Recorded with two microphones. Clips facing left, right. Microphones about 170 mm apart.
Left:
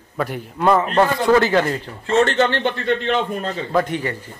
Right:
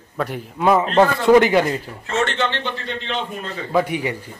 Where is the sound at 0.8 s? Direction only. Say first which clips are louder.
Right 2 dB; 20° right (ahead or behind).